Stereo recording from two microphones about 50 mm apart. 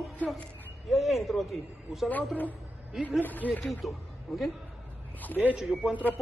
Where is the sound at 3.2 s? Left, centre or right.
Left.